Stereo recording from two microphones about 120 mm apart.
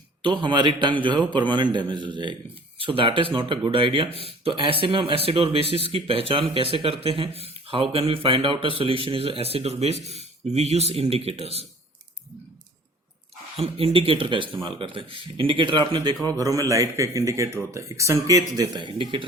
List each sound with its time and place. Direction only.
0.2 s a man's voice: 40° right (ahead or behind); by 11.6 s 55° right (ahead or behind)
13.6 s speech: 50° right (ahead or behind)